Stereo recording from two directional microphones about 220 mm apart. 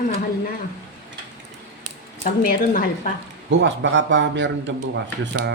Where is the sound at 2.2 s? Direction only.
40° left (ahead or behind).